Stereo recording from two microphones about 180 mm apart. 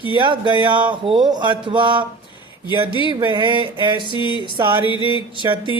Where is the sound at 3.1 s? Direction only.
25° right (ahead or behind).